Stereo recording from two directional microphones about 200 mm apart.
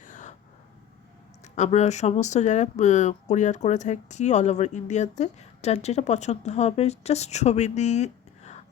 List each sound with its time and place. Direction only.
0.0 s vehicle: 40° left (ahead or behind)
1.5 s speech: 35° left (ahead or behind)